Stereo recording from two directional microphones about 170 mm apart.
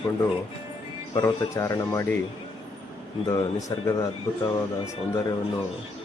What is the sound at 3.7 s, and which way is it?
Speech, 20° left (ahead or behind).